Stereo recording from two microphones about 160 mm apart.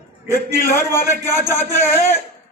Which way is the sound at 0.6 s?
15° left (ahead or behind).